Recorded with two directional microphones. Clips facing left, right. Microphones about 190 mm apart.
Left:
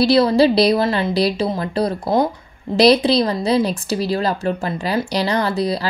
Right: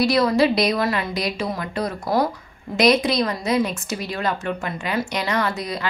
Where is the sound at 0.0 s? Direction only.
30° left (ahead or behind).